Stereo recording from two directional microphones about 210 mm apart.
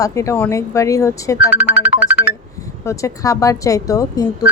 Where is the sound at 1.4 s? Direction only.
10° right (ahead or behind).